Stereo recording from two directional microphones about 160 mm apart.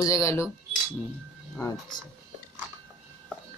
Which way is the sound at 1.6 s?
20° left (ahead or behind).